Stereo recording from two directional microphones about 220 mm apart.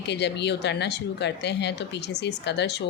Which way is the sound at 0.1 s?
50° left (ahead or behind).